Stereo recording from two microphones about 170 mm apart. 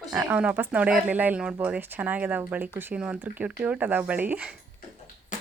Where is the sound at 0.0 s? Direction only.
5° right (ahead or behind).